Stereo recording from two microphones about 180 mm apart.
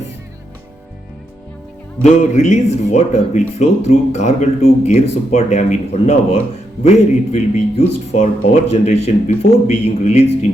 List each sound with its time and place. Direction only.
2.0 s speech: 40° left (ahead or behind)